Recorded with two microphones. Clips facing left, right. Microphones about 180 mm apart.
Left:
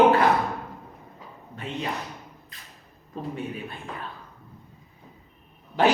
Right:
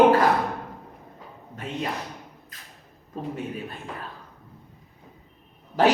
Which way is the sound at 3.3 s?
40° right (ahead or behind).